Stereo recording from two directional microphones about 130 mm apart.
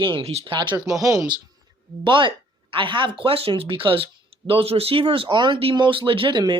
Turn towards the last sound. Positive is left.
turn(degrees=-35)  # may be behind; listen again after turning